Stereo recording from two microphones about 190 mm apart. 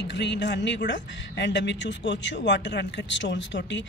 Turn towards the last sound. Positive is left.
turn(degrees=70)  # may be behind; listen again after turning